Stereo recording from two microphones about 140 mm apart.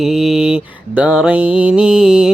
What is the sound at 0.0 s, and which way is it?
Mantra, centre (ahead or behind).